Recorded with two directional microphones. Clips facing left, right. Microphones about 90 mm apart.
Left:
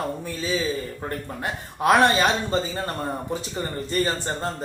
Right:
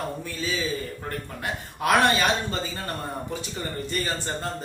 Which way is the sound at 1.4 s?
30° left (ahead or behind).